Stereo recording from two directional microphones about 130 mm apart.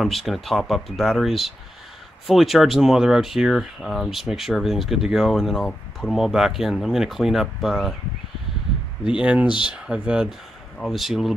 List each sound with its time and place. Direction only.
0.0 s speech: centre (ahead or behind)
9.1 s speech: 10° right (ahead or behind)